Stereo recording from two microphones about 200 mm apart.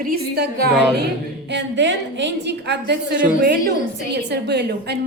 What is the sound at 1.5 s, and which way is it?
A woman's voice, 65° right (ahead or behind).